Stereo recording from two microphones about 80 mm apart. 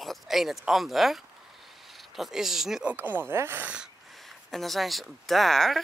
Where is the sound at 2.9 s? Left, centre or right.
Right.